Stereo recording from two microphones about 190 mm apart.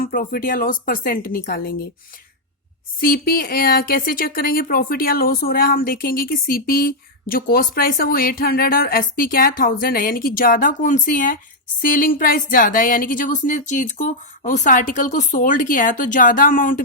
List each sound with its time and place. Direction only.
0.0 s speech: 50° left (ahead or behind)
3.0 s speech: 50° left (ahead or behind)